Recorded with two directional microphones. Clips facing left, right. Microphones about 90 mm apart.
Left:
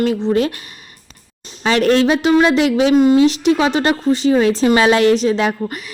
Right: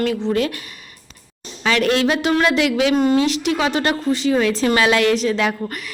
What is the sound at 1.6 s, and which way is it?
Speech, 30° left (ahead or behind).